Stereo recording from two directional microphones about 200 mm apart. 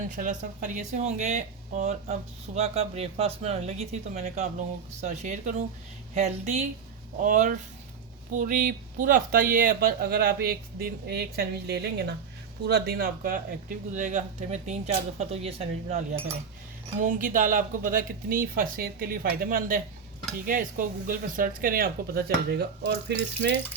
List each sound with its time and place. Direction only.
0.0 s speech: 40° right (ahead or behind)
17.0 s speech: 40° right (ahead or behind)